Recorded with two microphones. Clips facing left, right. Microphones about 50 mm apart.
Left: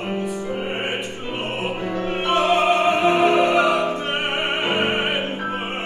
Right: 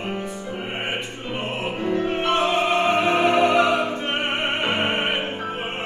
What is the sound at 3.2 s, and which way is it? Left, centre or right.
Music, centre.